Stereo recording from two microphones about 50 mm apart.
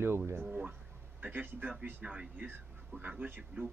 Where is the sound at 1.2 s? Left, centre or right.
Right.